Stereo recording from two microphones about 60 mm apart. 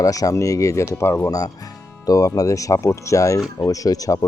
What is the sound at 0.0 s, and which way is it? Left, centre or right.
Speech, left.